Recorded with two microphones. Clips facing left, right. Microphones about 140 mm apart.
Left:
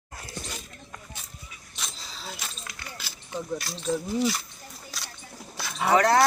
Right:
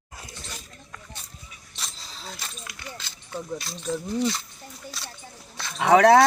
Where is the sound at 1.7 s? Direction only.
Centre (ahead or behind).